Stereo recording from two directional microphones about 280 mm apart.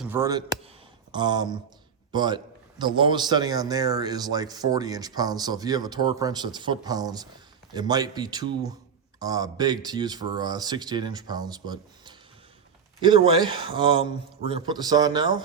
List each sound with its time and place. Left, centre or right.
0.0 s a man's voice: centre